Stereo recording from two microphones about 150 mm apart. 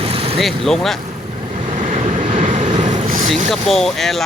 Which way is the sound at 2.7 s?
50° right (ahead or behind).